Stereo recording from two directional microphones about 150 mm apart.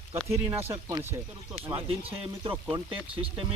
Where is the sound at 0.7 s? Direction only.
20° right (ahead or behind).